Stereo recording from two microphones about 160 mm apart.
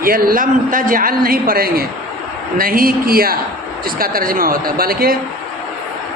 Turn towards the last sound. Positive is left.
turn(degrees=-70)  # may be behind; listen again after turning